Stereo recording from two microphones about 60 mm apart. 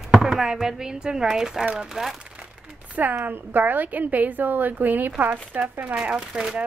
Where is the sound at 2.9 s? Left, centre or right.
Right.